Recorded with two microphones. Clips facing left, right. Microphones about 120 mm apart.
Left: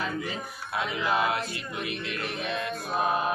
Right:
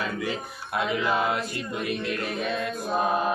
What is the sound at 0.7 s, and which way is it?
Music, 45° right (ahead or behind).